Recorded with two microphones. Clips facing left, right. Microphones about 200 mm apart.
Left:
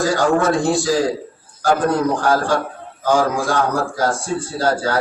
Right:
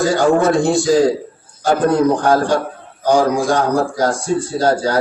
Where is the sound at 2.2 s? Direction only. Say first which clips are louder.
Right 3 dB; 20° right (ahead or behind).